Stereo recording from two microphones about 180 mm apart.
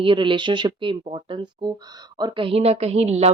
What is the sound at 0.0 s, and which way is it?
A woman's voice, 30° right (ahead or behind).